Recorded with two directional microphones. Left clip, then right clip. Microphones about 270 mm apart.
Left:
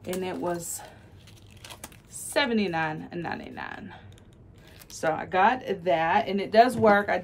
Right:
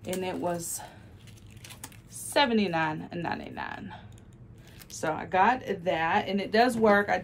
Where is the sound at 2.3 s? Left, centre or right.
Centre.